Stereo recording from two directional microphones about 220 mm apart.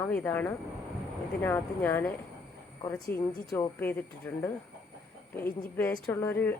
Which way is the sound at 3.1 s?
10° left (ahead or behind).